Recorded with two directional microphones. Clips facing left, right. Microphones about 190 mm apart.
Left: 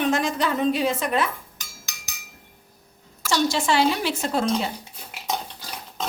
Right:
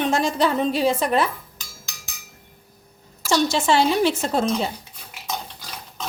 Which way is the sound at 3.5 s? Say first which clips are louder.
Even; 25° right (ahead or behind).